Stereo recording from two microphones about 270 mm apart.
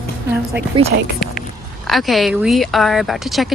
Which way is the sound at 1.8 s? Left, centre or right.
Centre.